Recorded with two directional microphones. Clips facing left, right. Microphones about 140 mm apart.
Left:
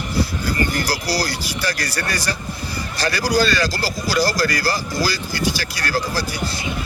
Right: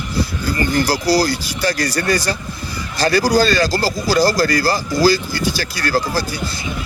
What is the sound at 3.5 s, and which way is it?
Speech, 40° right (ahead or behind).